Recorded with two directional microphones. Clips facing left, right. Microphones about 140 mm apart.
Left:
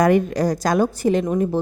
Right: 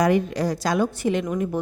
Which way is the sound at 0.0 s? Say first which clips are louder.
Left 4 dB; 50° left (ahead or behind).